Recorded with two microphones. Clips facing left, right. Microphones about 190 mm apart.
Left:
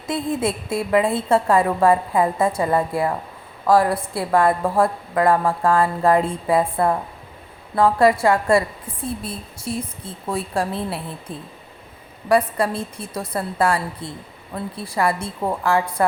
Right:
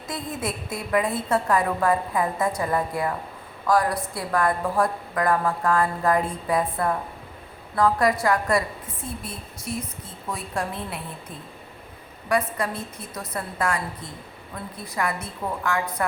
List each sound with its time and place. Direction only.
0.1 s a woman's voice: 25° left (ahead or behind)
12.3 s a woman's voice: 30° left (ahead or behind)